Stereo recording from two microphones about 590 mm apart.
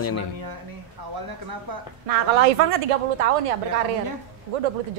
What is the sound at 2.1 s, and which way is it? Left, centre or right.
A woman's voice, right.